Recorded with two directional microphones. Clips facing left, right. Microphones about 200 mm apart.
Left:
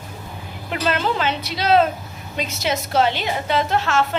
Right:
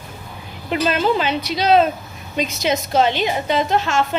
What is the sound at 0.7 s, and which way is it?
A woman's voice, 15° right (ahead or behind).